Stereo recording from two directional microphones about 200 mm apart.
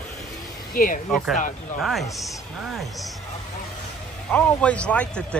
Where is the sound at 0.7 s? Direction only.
45° left (ahead or behind).